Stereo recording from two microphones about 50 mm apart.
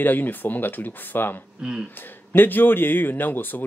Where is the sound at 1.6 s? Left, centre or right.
Centre.